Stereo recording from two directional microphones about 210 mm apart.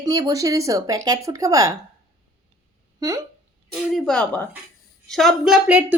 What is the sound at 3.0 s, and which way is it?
Speech, 15° right (ahead or behind).